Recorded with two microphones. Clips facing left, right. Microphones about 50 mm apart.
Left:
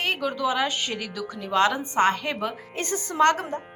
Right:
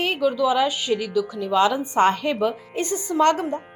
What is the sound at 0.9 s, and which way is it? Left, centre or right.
Speech, centre.